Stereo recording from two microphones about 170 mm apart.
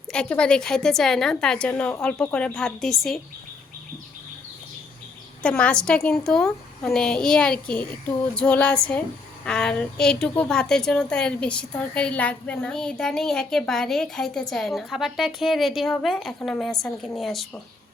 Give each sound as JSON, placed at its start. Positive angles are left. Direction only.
{"t": 0.1, "sound": "speech", "side_deg": 5}
{"t": 5.4, "sound": "speech", "side_deg": 5}